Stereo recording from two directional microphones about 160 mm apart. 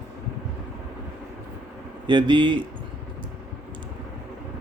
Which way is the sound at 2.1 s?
30° right (ahead or behind).